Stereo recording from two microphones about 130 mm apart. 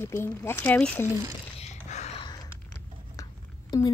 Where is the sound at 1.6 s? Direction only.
60° left (ahead or behind).